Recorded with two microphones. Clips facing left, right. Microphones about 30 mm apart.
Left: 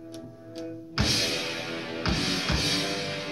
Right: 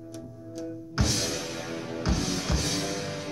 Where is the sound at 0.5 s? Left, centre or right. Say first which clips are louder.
Even; left.